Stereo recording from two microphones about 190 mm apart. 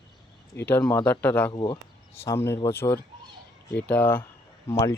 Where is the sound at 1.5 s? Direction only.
25° left (ahead or behind).